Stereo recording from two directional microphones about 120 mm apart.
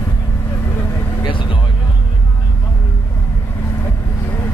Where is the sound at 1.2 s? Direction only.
45° left (ahead or behind).